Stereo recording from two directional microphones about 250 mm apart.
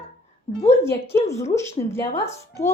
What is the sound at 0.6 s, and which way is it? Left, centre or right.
A child's voice, centre.